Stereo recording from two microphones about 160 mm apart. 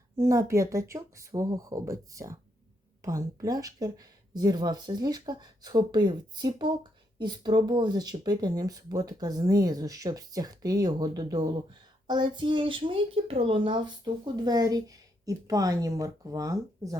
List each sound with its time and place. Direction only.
0.2 s speech: 20° right (ahead or behind)